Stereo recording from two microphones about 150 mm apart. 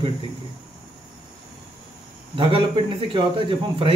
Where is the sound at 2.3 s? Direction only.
35° right (ahead or behind).